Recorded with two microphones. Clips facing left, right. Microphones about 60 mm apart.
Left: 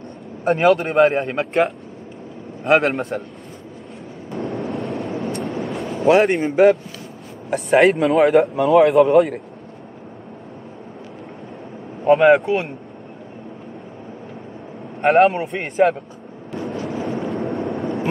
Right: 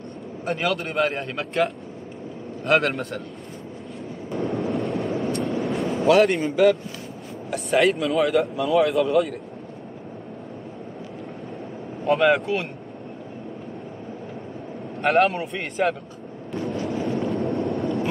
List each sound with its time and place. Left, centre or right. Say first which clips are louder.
0.5 s speech: left 9 dB; left
1.0 s speech: left 8 dB; left
1.4 s a man's voice: left 2 dB; centre
4.3 s vehicle: even; centre
6.0 s a man's voice: left 3 dB; left
6.3 s speech: left 4 dB; left
12.0 s speech: left 6 dB; centre
15.2 s a man's voice: left 6 dB; centre
15.7 s speech: left 7 dB; left
16.5 s a sound: left 1 dB; centre
17.2 s vehicle: left 1 dB; centre